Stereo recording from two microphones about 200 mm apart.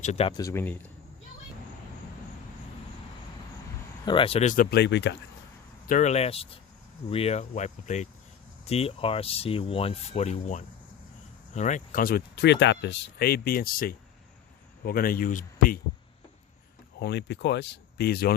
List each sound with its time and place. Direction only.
0.0 s speech: 30° left (ahead or behind); by 0.8 s 10° left (ahead or behind)
4.0 s speech: 25° left (ahead or behind); by 5.1 s 60° left (ahead or behind)
5.9 s speech: 35° left (ahead or behind)
17.0 s speech: 55° left (ahead or behind)